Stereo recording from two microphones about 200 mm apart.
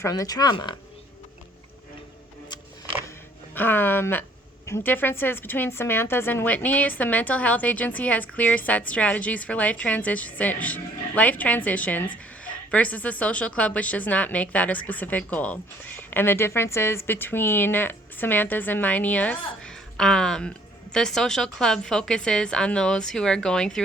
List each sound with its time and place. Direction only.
0.0 s speech: 20° left (ahead or behind)
3.5 s a woman's voice: 10° left (ahead or behind)